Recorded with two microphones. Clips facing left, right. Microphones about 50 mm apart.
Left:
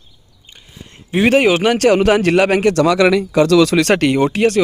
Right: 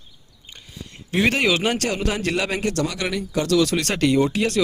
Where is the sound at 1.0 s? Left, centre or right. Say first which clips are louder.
Left 7 dB; centre.